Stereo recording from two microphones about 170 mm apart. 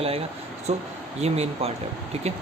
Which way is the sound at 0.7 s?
40° right (ahead or behind).